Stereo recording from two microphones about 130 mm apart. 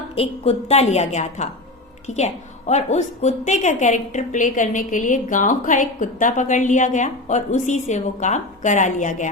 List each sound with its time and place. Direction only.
0.2 s a woman's voice: 55° left (ahead or behind); by 9.3 s 70° left (ahead or behind)